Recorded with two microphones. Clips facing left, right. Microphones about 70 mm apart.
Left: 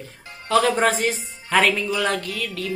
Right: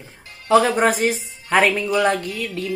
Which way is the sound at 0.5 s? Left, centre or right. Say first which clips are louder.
Right 3 dB; centre.